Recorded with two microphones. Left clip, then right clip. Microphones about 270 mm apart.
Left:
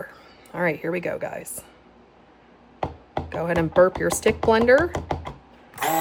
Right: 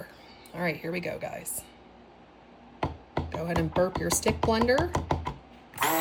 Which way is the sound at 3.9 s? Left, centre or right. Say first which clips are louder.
Left 6 dB; centre.